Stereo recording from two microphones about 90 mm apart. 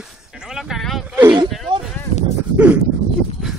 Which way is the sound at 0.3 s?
5° right (ahead or behind).